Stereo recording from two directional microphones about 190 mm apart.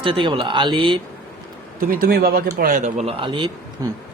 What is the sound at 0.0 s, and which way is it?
Speech, 25° right (ahead or behind).